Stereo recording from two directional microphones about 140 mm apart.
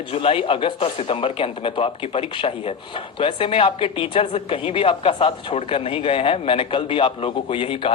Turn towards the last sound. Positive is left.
turn(degrees=40)  # may be behind; listen again after turning